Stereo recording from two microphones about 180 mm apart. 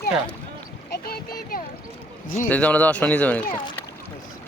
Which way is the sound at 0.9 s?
55° left (ahead or behind).